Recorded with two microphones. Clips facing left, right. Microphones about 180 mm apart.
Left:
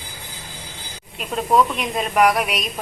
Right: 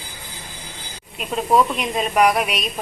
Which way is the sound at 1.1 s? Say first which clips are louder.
Even; 5° right (ahead or behind).